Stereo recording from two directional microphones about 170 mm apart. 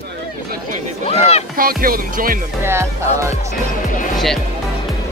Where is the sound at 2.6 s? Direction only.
15° right (ahead or behind).